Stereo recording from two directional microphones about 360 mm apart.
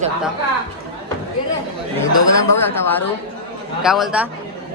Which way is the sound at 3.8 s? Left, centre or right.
Centre.